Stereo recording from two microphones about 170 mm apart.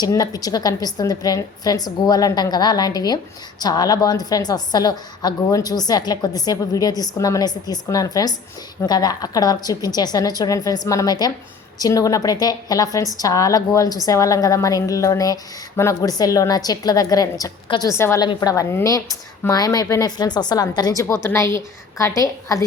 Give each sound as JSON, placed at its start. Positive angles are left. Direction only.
{"t": 0.0, "sound": "a woman's voice", "side_deg": 20}